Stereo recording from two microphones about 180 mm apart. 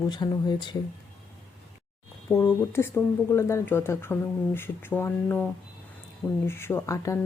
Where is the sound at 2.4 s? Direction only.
15° left (ahead or behind).